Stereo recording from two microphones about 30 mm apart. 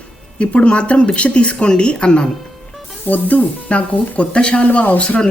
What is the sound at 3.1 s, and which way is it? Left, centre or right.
Speech, left.